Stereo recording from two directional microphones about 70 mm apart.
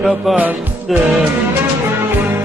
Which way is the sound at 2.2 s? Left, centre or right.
Right.